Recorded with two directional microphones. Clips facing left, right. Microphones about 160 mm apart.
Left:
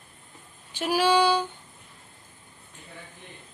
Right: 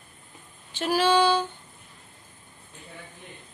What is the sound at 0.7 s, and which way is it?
Speech, 10° left (ahead or behind).